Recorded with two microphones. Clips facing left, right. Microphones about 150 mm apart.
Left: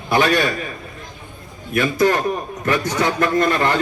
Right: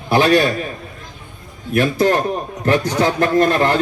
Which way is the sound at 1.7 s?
35° right (ahead or behind).